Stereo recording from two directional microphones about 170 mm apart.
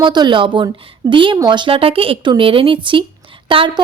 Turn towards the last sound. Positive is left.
turn(degrees=-30)  # may be behind; listen again after turning